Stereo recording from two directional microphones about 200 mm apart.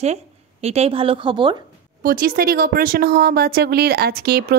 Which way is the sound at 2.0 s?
45° right (ahead or behind).